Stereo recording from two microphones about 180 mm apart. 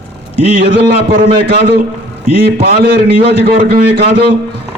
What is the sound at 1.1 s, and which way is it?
A man's voice, 55° right (ahead or behind).